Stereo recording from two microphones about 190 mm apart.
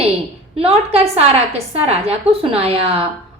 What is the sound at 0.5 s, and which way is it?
A woman's voice, 30° right (ahead or behind).